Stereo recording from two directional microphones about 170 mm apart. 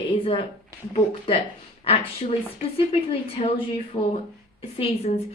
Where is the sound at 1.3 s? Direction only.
35° left (ahead or behind).